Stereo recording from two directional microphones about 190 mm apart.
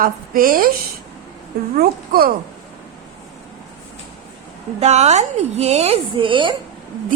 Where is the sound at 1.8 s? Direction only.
50° right (ahead or behind).